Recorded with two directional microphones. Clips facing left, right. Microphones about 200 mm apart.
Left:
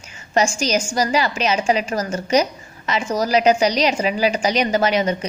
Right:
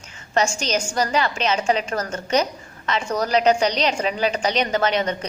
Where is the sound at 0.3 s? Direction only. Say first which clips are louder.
Left 3 dB; 10° left (ahead or behind).